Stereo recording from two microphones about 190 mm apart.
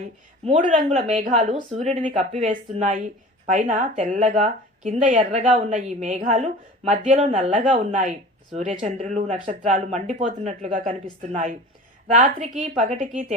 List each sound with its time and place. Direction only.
0.4 s speech: 40° right (ahead or behind)